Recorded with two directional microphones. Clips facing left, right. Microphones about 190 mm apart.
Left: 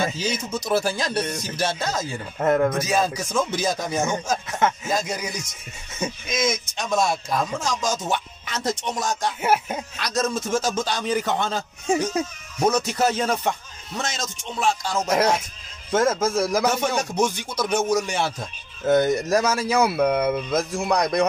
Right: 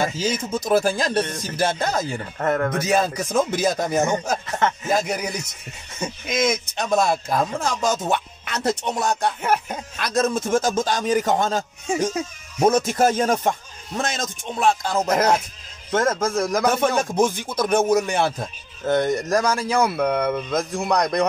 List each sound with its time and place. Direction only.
0.3 s speech: 50° right (ahead or behind)
2.3 s speech: 10° left (ahead or behind)
2.8 s speech: 60° right (ahead or behind)
4.6 s speech: 5° left (ahead or behind)
4.9 s speech: 60° right (ahead or behind)
9.4 s speech: 5° left (ahead or behind)
9.9 s speech: 55° right (ahead or behind)
15.9 s speech: 5° left (ahead or behind)
16.8 s speech: 50° right (ahead or behind)
18.9 s speech: 5° left (ahead or behind)